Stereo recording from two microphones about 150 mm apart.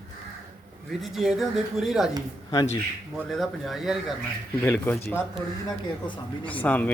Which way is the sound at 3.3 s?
Centre (ahead or behind).